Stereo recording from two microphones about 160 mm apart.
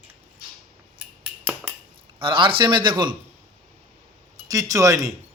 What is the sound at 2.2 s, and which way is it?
Speech, 30° right (ahead or behind).